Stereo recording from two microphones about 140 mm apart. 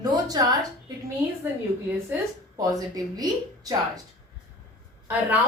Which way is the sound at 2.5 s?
25° right (ahead or behind).